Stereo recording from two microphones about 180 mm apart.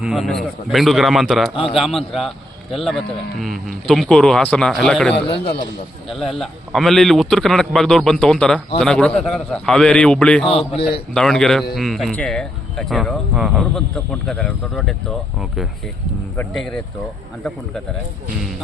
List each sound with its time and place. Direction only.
0.0 s speech: centre (ahead or behind)
5.3 s a man's voice: 30° left (ahead or behind)
6.1 s speech: centre (ahead or behind)
10.7 s speech: 30° left (ahead or behind)
11.1 s speech: 5° left (ahead or behind)